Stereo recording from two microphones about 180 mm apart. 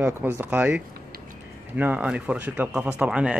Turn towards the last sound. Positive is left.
turn(degrees=-5)  # may be behind; listen again after turning